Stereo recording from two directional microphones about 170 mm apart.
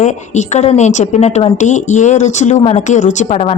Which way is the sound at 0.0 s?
45° left (ahead or behind).